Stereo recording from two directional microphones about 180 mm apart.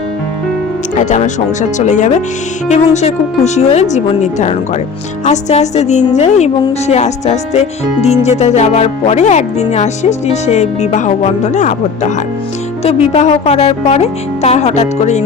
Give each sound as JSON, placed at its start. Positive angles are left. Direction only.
{"t": 0.9, "sound": "speech", "side_deg": 40}
{"t": 13.1, "sound": "speech", "side_deg": 40}